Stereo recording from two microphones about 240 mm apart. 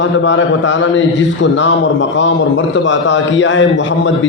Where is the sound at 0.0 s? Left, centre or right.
Left.